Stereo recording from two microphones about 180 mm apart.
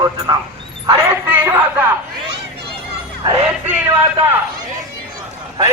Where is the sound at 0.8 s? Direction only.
15° right (ahead or behind).